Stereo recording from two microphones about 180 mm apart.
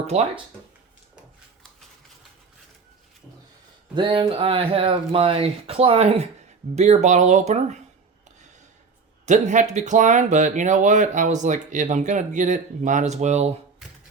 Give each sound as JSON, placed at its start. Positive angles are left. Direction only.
{"t": 3.9, "sound": "speech", "side_deg": -25}
{"t": 9.2, "sound": "speech", "side_deg": -45}